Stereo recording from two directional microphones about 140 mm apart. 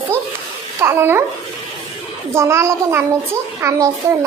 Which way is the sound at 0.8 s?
15° right (ahead or behind).